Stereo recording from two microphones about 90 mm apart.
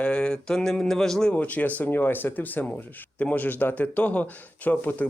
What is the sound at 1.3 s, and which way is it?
Speech, 15° left (ahead or behind).